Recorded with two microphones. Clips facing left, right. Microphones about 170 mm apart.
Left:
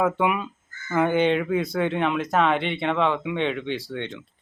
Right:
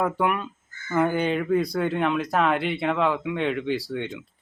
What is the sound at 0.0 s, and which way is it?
Speech, 5° left (ahead or behind).